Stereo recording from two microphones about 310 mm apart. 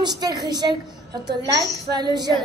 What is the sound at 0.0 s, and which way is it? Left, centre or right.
A woman's voice, centre.